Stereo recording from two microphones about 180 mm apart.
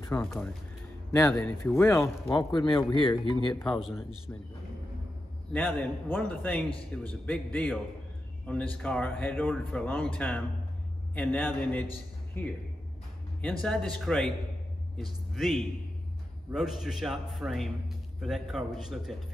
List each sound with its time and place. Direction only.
0.2 s a man's voice: 5° left (ahead or behind)
2.5 s speech: 25° left (ahead or behind)
3.6 s a man's voice: centre (ahead or behind)
4.3 s speech: 15° left (ahead or behind)
5.5 s a man's voice: 5° left (ahead or behind)